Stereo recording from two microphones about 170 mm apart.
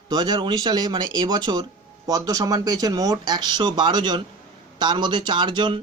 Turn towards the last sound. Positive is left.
turn(degrees=-25)  # may be behind; listen again after turning